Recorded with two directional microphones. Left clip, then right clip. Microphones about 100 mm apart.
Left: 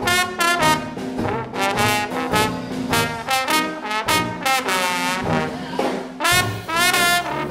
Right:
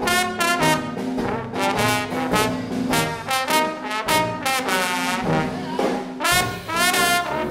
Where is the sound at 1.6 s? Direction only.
20° left (ahead or behind).